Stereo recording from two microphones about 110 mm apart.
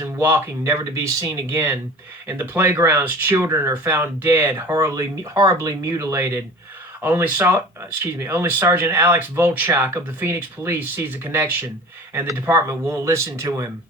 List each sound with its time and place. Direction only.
0.0 s speech: 20° right (ahead or behind)
12.5 s speech: 25° right (ahead or behind)